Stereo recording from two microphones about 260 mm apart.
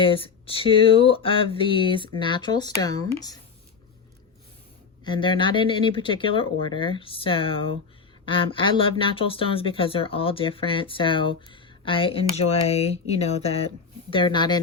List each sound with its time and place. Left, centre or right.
0.0 s speech: left
5.0 s speech: centre